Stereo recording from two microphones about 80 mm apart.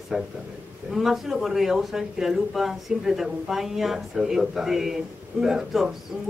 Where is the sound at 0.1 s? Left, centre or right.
Centre.